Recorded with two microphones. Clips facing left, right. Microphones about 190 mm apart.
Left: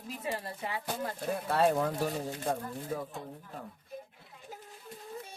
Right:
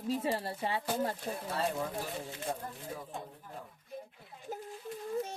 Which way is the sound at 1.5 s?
60° left (ahead or behind).